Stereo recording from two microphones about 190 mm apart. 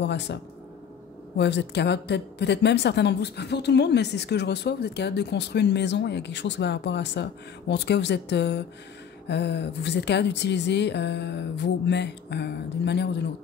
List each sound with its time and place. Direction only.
0.0 s a woman's voice: 65° left (ahead or behind)